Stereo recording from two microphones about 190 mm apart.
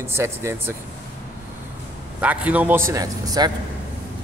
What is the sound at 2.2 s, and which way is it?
Speech, 10° right (ahead or behind).